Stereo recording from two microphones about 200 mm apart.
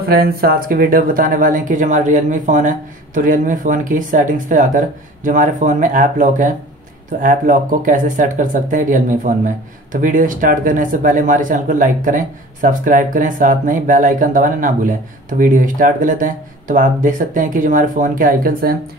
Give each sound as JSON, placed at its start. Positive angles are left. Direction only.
{"t": 0.1, "sound": "speech", "side_deg": -50}